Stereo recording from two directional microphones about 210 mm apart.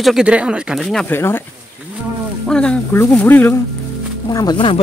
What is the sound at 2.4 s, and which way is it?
Speech, 5° left (ahead or behind).